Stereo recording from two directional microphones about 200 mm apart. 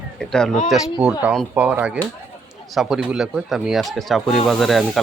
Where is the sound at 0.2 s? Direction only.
5° left (ahead or behind).